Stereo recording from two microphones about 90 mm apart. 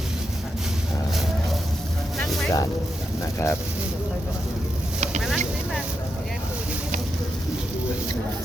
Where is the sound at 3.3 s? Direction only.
30° left (ahead or behind).